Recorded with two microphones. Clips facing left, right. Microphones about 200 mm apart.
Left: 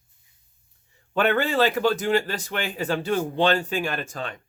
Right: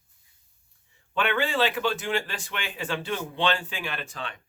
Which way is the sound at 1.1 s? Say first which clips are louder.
Left 5 dB; 40° left (ahead or behind).